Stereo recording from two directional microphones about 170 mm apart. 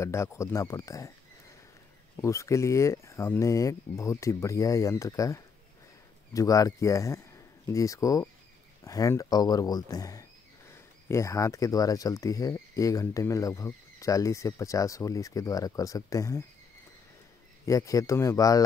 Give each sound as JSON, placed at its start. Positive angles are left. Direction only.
{"t": 0.0, "sound": "speech", "side_deg": 15}
{"t": 2.2, "sound": "speech", "side_deg": 15}
{"t": 17.6, "sound": "speech", "side_deg": 20}